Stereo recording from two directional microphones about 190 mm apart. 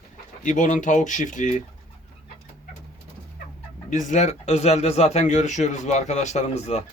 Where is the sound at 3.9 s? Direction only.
40° left (ahead or behind).